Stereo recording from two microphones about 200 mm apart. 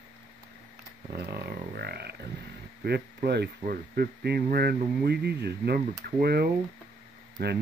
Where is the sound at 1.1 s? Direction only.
50° right (ahead or behind).